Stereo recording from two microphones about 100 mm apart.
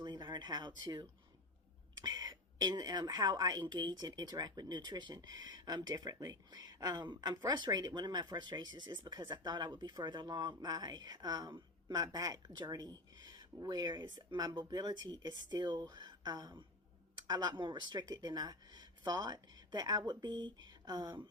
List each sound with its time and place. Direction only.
0.0 s a woman's voice: 45° right (ahead or behind)